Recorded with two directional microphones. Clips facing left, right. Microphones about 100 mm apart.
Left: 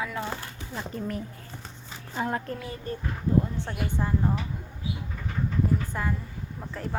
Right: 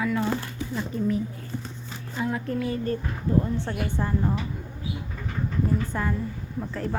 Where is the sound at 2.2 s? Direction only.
45° left (ahead or behind).